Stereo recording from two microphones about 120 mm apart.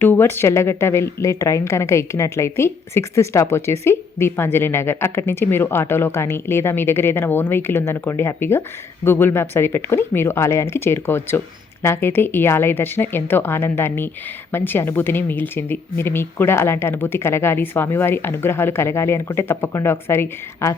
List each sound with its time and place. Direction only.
0.0 s speech: 20° left (ahead or behind)